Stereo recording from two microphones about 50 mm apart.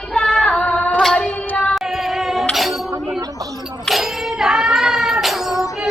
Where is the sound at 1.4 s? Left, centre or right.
Left.